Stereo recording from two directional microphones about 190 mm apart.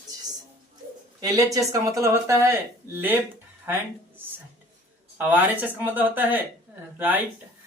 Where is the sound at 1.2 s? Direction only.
20° right (ahead or behind).